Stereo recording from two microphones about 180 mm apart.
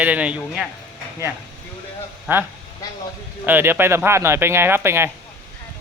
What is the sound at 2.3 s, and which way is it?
Speech, 10° right (ahead or behind).